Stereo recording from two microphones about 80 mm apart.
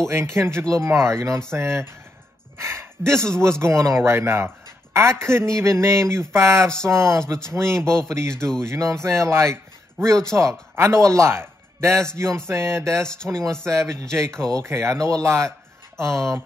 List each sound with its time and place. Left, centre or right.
0.0 s speech: right
3.0 s speech: centre
3.3 s a man's voice: right
13.1 s speech: centre
13.7 s speech: right